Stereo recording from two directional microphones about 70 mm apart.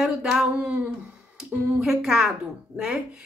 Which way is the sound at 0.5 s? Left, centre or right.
Centre.